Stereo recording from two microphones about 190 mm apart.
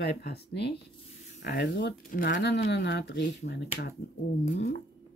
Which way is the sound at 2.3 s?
65° left (ahead or behind).